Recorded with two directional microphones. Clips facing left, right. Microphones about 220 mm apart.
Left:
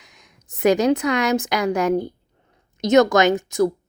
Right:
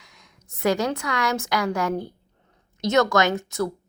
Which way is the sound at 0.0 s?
20° left (ahead or behind).